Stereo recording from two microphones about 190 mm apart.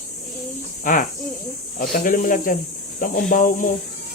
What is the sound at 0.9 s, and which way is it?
Speech, 45° left (ahead or behind).